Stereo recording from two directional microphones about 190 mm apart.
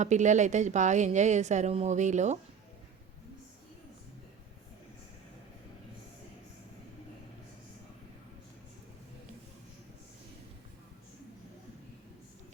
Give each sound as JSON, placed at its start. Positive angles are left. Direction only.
{"t": 0.0, "sound": "a woman's voice", "side_deg": -40}